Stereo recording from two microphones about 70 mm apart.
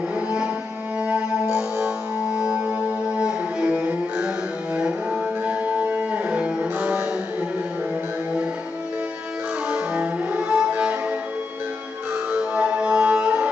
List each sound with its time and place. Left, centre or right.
1.0 s music: centre
3.2 s music: centre
5.4 s music: centre
9.7 s music: centre
12.3 s music: centre